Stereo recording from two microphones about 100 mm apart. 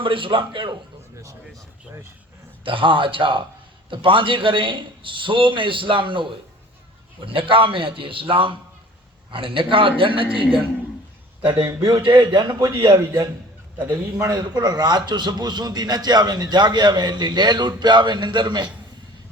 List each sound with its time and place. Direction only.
0.0 s a man's voice: 60° right (ahead or behind)
2.6 s a man's voice: 60° right (ahead or behind)
11.9 s a man's voice: 50° right (ahead or behind)